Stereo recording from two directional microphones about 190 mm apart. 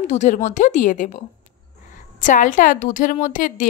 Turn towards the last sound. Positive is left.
turn(degrees=45)  # may be behind; listen again after turning